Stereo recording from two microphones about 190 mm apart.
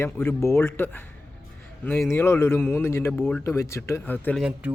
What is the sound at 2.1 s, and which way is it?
Speech, 10° left (ahead or behind).